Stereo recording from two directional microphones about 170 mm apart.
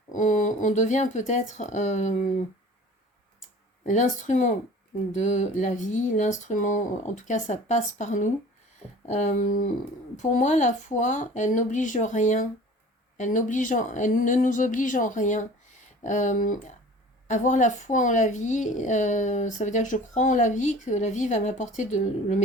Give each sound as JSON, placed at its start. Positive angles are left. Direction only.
{"t": 0.1, "sound": "speech", "side_deg": 50}
{"t": 3.8, "sound": "speech", "side_deg": 45}